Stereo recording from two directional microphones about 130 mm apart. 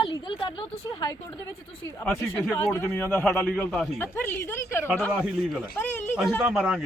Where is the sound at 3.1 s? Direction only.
5° left (ahead or behind).